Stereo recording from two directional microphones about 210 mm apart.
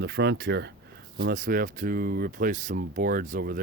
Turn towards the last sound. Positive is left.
turn(degrees=-45)  # may be behind; listen again after turning